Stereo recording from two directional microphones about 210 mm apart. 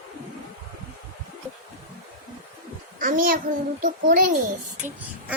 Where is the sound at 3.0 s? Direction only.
40° right (ahead or behind).